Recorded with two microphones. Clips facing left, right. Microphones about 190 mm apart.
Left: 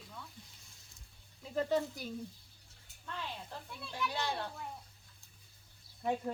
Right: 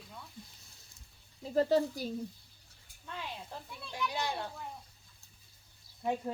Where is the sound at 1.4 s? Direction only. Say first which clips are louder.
Right 5 dB; 35° right (ahead or behind).